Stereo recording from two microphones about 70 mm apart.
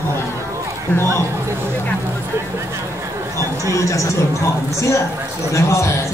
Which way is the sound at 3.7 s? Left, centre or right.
Left.